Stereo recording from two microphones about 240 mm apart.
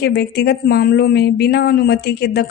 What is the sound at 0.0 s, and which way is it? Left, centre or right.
Speech, left.